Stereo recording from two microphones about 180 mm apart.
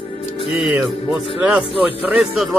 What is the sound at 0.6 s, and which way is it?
Speech, 5° right (ahead or behind).